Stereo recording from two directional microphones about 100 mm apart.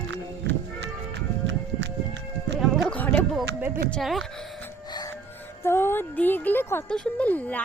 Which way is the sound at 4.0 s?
Centre (ahead or behind).